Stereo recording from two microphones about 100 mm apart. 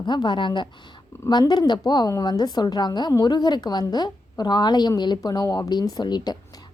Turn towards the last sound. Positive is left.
turn(degrees=45)  # may be behind; listen again after turning